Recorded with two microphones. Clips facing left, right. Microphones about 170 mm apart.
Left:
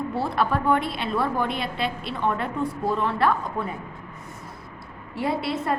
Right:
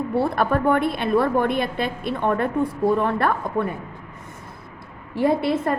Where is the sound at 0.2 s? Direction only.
55° right (ahead or behind).